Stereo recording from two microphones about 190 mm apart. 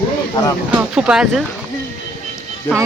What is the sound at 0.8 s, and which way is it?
Speech, 5° right (ahead or behind).